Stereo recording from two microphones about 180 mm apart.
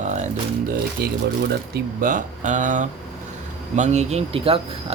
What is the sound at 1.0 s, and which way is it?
Speech, 60° right (ahead or behind).